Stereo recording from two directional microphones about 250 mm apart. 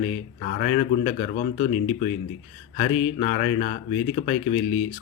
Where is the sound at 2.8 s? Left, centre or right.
Left.